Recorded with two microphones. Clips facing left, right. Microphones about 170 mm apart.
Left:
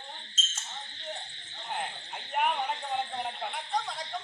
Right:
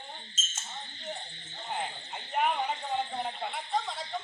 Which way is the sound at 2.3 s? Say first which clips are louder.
Even; centre (ahead or behind).